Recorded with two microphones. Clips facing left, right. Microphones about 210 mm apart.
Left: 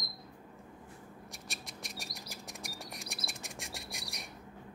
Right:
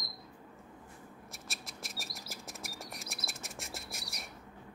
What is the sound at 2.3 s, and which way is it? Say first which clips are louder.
Chirp: right 1 dB; centre (ahead or behind).